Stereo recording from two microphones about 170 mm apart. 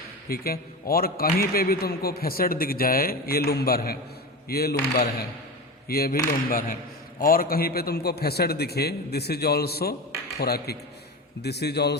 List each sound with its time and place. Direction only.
0.3 s a man's voice: 65° left (ahead or behind)